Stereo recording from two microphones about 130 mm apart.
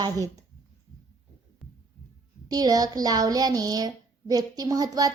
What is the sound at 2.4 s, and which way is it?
Speech, 30° right (ahead or behind).